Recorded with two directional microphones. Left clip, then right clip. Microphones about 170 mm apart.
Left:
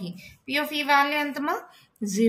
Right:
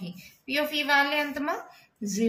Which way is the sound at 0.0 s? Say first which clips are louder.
Left 3 dB; 35° left (ahead or behind).